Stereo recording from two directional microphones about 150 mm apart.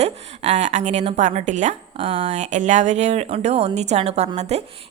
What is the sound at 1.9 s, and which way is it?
Speech, 40° right (ahead or behind).